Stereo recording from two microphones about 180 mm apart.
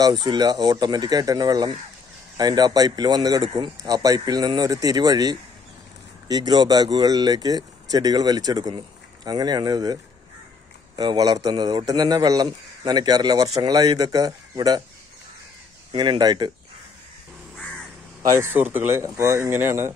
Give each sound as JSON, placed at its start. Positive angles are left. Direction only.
{"t": 0.0, "sound": "speech", "side_deg": -20}
{"t": 11.0, "sound": "speech", "side_deg": -20}
{"t": 15.9, "sound": "speech", "side_deg": -25}
{"t": 18.3, "sound": "speech", "side_deg": -10}